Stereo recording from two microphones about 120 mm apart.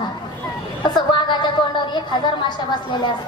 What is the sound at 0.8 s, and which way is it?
A woman's voice, 40° left (ahead or behind).